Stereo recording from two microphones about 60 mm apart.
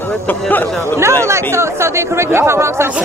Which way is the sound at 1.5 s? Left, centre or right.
Right.